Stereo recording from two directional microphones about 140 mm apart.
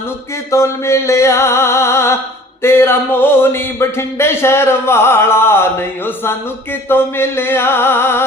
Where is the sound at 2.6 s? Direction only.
15° left (ahead or behind).